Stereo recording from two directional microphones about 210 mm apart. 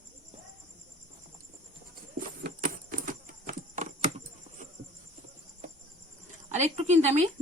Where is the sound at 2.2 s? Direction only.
40° right (ahead or behind).